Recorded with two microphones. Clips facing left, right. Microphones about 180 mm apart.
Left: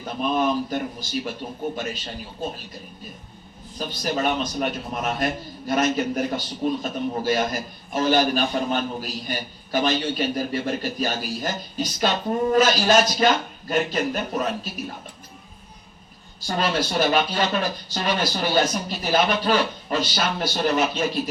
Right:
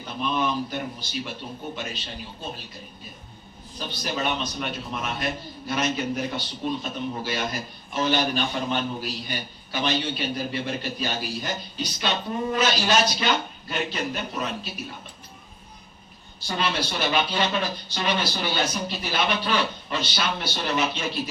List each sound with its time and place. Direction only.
0.2 s a man's voice: 45° left (ahead or behind)
3.8 s a man's voice: 40° left (ahead or behind)
16.5 s a man's voice: 45° left (ahead or behind)